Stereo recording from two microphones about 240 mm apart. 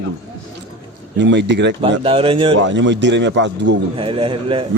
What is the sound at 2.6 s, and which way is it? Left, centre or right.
A man's voice, right.